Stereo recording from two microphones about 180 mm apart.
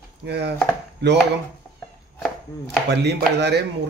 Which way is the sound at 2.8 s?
70° right (ahead or behind).